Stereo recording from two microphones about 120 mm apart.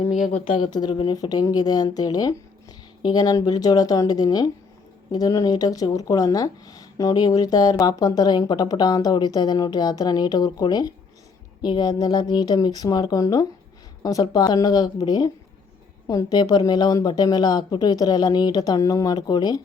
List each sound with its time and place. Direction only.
0.5 s speech: 40° left (ahead or behind)